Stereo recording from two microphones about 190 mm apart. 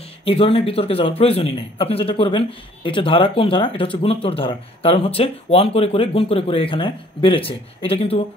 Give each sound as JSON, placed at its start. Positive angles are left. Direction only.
{"t": 0.2, "sound": "a man's voice", "side_deg": 30}